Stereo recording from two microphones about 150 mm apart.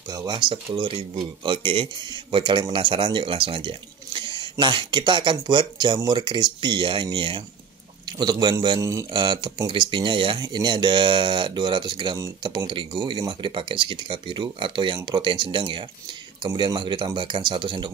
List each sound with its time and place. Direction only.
0.1 s speech: 30° right (ahead or behind)